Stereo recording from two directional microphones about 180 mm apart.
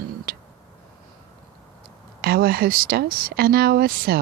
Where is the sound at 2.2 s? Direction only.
60° right (ahead or behind).